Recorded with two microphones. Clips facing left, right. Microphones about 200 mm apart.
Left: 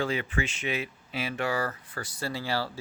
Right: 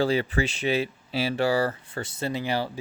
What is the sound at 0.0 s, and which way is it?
Speech, 35° right (ahead or behind).